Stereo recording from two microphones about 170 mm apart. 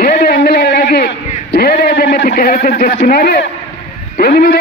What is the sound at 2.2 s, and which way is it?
Speech, 55° left (ahead or behind).